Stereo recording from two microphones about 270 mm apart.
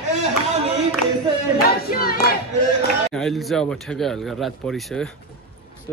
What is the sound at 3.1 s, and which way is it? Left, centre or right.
Speech, centre.